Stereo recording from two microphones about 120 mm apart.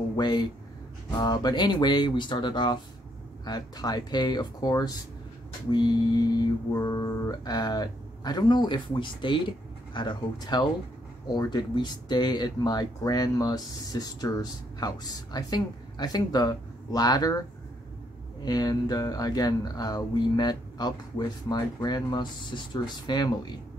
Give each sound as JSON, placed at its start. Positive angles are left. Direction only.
{"t": 0.1, "sound": "speech", "side_deg": 35}
{"t": 18.4, "sound": "speech", "side_deg": 35}